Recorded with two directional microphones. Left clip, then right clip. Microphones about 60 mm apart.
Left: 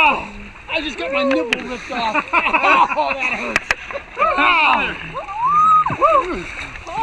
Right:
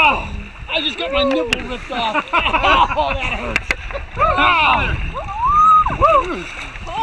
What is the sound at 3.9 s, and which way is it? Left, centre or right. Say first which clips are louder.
Boat: right 2 dB; centre.